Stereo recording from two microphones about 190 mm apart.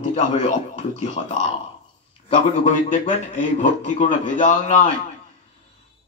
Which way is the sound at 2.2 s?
30° left (ahead or behind).